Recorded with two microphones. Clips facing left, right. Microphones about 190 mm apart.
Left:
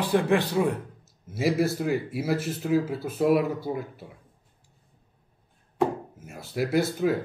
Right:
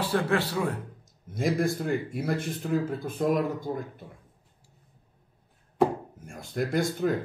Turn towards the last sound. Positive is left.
turn(degrees=5)  # may be behind; listen again after turning